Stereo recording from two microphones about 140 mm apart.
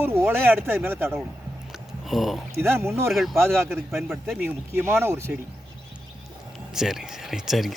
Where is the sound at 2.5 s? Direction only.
20° right (ahead or behind).